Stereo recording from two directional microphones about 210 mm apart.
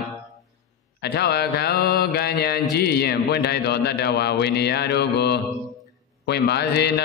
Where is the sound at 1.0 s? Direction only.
50° left (ahead or behind).